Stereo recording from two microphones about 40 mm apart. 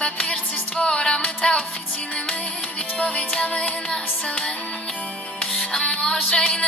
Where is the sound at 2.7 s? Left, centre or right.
Left.